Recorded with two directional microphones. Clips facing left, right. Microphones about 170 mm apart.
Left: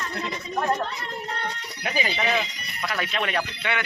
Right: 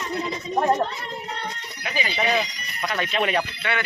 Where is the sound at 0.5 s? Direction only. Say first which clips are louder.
Right 4 dB; 20° right (ahead or behind).